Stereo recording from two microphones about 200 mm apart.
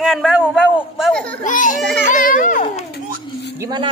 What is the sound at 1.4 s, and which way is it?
A child's voice, 40° left (ahead or behind).